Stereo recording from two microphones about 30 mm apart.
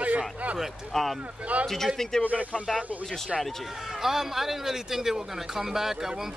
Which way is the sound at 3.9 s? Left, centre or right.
Centre.